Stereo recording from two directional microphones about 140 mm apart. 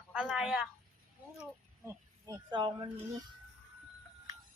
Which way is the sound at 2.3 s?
35° right (ahead or behind).